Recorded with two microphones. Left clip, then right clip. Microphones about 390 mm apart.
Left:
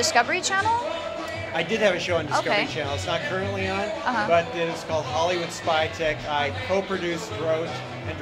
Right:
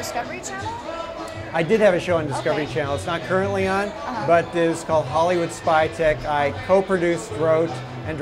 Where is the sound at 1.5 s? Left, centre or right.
Right.